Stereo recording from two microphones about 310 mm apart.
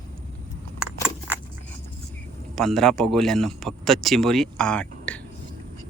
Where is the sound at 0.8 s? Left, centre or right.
Centre.